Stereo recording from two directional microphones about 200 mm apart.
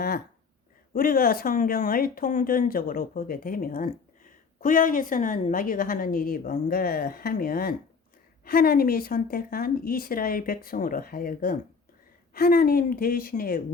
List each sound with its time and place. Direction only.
0.9 s speech: 45° left (ahead or behind)